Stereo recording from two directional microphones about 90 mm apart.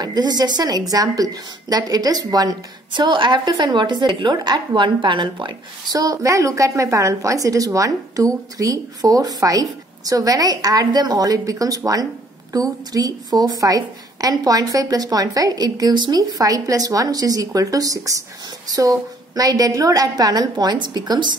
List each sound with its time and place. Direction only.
0.0 s a woman's voice: 50° right (ahead or behind)
5.9 s a woman's voice: 40° right (ahead or behind)